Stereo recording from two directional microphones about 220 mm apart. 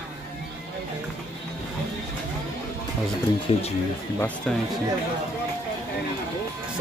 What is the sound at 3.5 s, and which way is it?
Speech, 25° left (ahead or behind).